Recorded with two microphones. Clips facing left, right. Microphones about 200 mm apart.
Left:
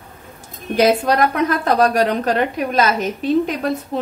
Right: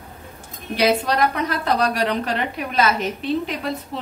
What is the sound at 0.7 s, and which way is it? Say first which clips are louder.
A woman's voice: left 4 dB; 50° left (ahead or behind).